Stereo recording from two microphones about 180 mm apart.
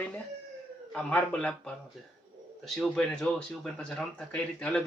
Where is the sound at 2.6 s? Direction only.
5° left (ahead or behind).